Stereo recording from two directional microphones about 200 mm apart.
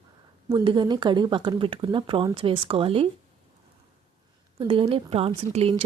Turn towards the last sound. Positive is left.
turn(degrees=-30)  # may be behind; listen again after turning